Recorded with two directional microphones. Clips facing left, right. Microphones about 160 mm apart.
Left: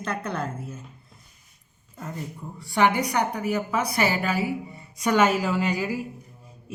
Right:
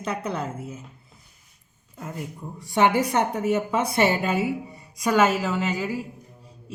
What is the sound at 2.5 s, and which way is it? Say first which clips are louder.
A woman's voice: right 2 dB; 20° right (ahead or behind).